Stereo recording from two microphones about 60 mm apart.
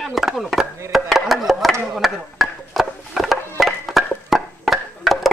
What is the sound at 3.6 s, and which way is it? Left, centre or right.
Music, centre.